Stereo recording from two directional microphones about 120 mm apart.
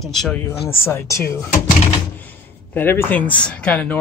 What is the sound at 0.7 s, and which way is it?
Speech, 20° left (ahead or behind).